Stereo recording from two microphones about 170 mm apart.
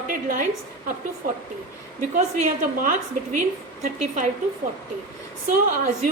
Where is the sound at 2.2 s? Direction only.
50° right (ahead or behind).